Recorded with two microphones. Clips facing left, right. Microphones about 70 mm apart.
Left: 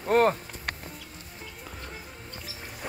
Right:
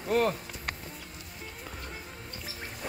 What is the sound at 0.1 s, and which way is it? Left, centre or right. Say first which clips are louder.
Speech: left 5 dB; left.